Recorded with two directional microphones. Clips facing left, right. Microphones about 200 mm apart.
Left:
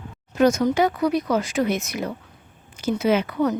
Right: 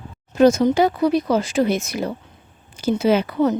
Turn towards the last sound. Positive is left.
turn(degrees=-30)  # may be behind; listen again after turning